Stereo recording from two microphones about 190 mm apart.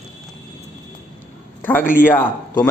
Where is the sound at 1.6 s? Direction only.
10° left (ahead or behind).